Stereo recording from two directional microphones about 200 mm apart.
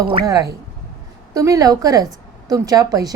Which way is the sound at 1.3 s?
15° right (ahead or behind).